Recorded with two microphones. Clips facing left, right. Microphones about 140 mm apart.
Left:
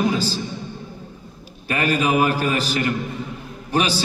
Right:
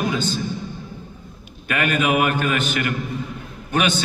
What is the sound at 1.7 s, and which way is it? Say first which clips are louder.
A man's voice: even; 35° left (ahead or behind).